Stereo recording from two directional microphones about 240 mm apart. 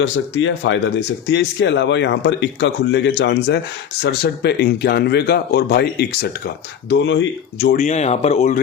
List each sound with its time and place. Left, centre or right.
0.0 s speech: left
7.8 s speech: left